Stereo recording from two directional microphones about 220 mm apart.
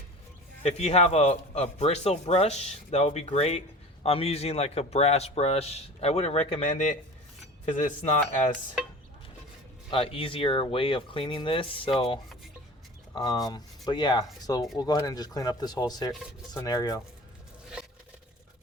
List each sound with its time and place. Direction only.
0.6 s speech: 30° left (ahead or behind)
9.9 s speech: 25° left (ahead or behind)